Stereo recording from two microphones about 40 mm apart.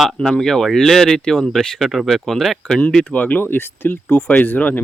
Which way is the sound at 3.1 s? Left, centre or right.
Left.